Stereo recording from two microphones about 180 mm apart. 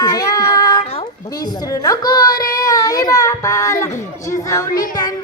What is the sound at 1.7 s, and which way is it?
Child singing, 20° left (ahead or behind).